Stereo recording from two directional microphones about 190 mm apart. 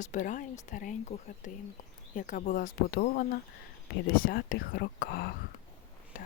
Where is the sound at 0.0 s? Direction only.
40° left (ahead or behind).